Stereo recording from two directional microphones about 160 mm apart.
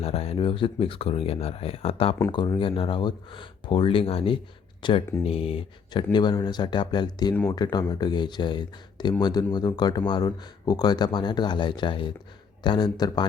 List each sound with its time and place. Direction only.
0.0 s speech: 40° left (ahead or behind)